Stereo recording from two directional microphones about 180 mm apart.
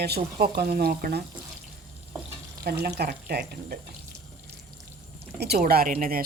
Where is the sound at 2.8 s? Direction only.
60° right (ahead or behind).